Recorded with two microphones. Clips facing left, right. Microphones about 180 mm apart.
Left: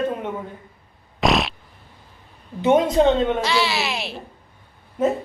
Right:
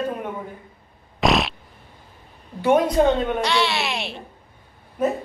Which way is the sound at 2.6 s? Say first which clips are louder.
Left 1 dB; 20° left (ahead or behind).